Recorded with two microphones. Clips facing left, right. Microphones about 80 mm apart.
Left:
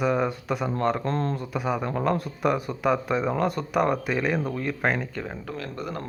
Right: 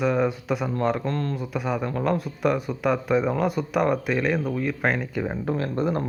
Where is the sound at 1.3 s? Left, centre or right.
Centre.